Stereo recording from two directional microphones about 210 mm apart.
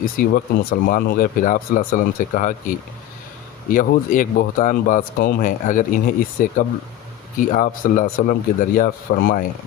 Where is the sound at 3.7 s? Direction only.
40° left (ahead or behind).